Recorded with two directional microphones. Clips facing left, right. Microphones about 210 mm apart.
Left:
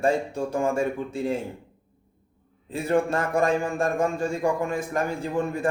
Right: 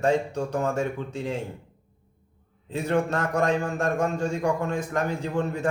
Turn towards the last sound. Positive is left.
turn(degrees=10)  # may be behind; listen again after turning